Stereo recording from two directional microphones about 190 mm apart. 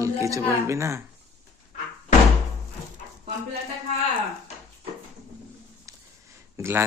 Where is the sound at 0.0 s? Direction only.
15° right (ahead or behind).